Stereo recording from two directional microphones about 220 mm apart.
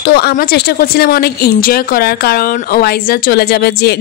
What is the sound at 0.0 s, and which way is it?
Speech, 45° left (ahead or behind).